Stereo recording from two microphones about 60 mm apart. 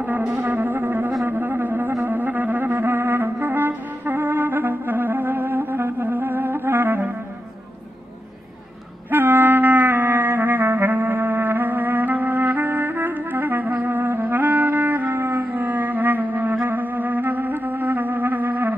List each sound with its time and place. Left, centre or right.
0.2 s music: right
9.1 s music: right